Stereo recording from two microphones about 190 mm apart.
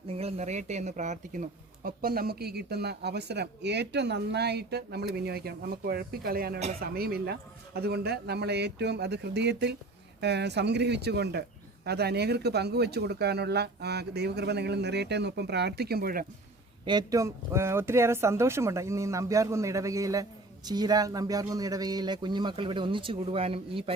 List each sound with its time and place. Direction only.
0.1 s speech: 35° right (ahead or behind); by 16.2 s 50° right (ahead or behind)
16.8 s a man's voice: 20° right (ahead or behind)